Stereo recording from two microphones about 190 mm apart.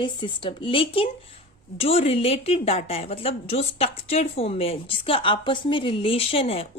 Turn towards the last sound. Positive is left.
turn(degrees=30)  # may be behind; listen again after turning